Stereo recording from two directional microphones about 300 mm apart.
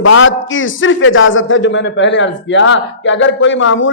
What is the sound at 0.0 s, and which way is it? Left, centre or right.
A man's voice, left.